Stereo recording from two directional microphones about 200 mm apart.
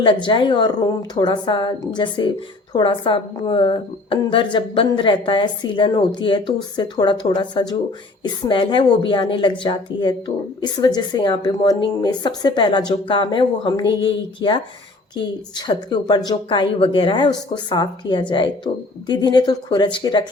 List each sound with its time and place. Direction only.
0.0 s speech: 25° left (ahead or behind)